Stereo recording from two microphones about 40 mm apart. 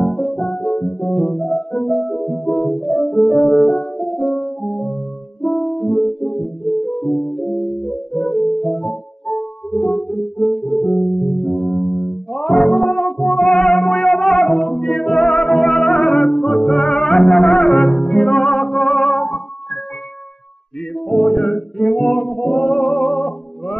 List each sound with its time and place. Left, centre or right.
0.0 s music: centre
21.1 s music: centre